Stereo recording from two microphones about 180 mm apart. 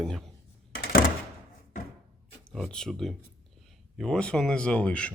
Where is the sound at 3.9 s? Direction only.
5° left (ahead or behind).